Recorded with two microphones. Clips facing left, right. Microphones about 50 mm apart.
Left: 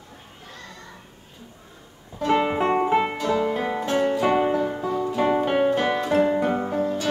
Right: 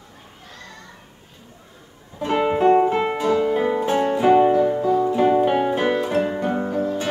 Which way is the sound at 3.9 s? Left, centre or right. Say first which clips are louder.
Right 3 dB; centre.